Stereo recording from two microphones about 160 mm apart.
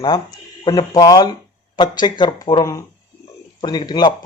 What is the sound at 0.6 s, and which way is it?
Speech, 25° left (ahead or behind).